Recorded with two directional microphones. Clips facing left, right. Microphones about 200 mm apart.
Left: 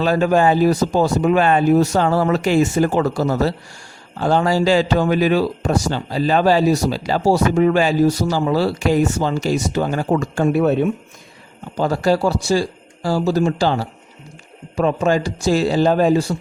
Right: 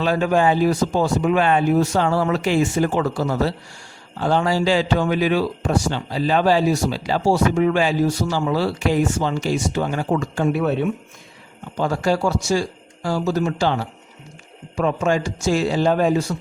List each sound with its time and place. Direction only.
0.0 s a man's voice: 40° left (ahead or behind)